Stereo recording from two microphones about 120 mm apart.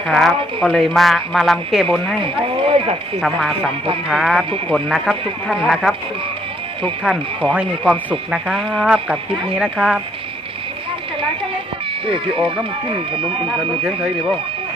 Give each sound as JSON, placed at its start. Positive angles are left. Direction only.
{"t": 0.1, "sound": "speech", "side_deg": 0}
{"t": 2.2, "sound": "speech", "side_deg": -50}
{"t": 3.2, "sound": "speech", "side_deg": 0}
{"t": 7.9, "sound": "speech", "side_deg": -5}
{"t": 12.0, "sound": "speech", "side_deg": -45}